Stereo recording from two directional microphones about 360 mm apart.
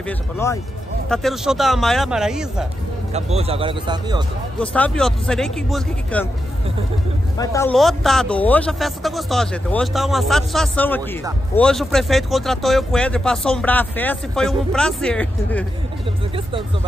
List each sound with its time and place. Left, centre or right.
0.0 s speech: centre
3.1 s a man's voice: centre
4.6 s speech: centre
7.3 s speech: centre